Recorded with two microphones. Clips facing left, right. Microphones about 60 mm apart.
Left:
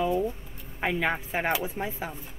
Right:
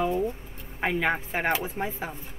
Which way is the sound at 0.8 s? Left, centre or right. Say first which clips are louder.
Right 1 dB; centre.